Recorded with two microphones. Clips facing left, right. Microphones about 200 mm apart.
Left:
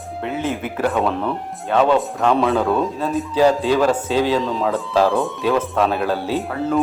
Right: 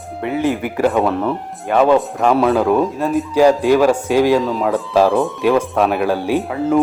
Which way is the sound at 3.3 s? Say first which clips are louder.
Right 4 dB; 10° right (ahead or behind).